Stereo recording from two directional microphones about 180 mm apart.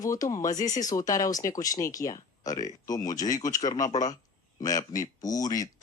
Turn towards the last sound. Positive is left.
turn(degrees=20)  # may be behind; listen again after turning